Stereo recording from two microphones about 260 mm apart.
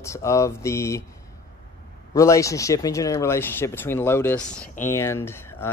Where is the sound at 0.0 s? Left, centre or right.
Centre.